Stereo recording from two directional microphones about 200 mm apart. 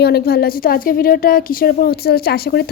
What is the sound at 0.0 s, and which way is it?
A woman's voice, 55° left (ahead or behind).